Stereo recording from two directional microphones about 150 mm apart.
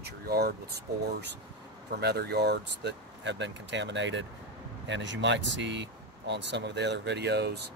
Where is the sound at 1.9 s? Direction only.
90° right.